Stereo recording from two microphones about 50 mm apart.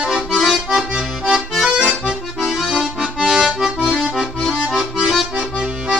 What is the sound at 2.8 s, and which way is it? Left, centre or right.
Music, centre.